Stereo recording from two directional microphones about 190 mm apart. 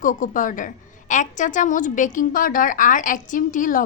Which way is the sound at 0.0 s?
45° left (ahead or behind).